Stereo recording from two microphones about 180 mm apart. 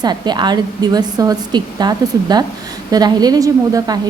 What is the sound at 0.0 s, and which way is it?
A woman's voice, 25° right (ahead or behind).